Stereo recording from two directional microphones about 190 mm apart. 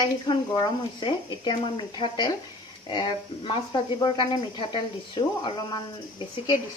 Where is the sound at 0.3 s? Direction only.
20° left (ahead or behind).